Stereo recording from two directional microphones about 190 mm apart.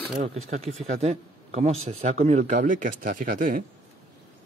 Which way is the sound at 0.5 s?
35° right (ahead or behind).